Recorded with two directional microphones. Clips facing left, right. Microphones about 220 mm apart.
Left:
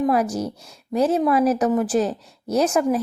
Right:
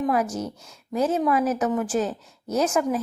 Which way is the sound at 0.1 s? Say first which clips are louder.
Left 3 dB; 35° left (ahead or behind).